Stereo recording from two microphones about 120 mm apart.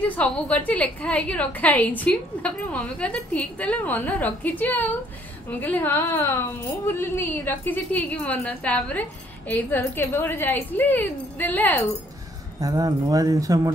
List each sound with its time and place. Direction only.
0.0 s a woman's voice: 10° left (ahead or behind)
12.5 s speech: 30° right (ahead or behind)